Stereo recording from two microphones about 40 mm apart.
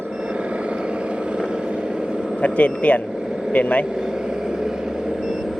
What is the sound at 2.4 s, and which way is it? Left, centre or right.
Speech, left.